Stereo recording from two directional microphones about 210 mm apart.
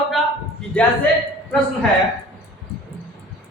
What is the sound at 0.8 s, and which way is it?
Speech, 5° left (ahead or behind).